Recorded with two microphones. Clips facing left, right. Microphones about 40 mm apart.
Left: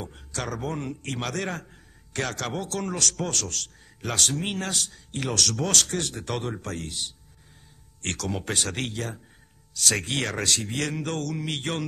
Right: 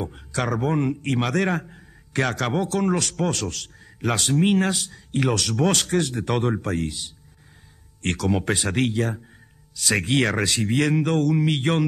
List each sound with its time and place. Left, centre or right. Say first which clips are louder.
0.0 s a man's voice: right 7 dB; right
8.0 s a man's voice: right 7 dB; right